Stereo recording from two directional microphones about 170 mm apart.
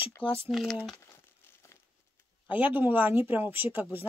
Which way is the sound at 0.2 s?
35° left (ahead or behind).